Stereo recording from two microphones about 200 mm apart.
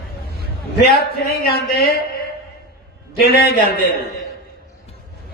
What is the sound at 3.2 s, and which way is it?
Speech, 50° left (ahead or behind).